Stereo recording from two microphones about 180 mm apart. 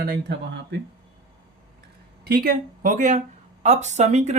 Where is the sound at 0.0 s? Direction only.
65° right (ahead or behind).